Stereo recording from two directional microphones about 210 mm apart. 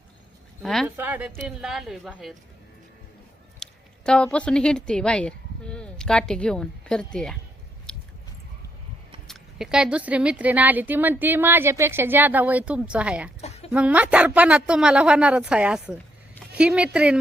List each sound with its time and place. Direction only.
0.6 s speech: centre (ahead or behind)
3.6 s speech: 5° left (ahead or behind)
7.9 s biting: 5° left (ahead or behind)
9.2 s speech: centre (ahead or behind)
13.4 s chicken: 30° left (ahead or behind)
13.7 s speech: 5° right (ahead or behind)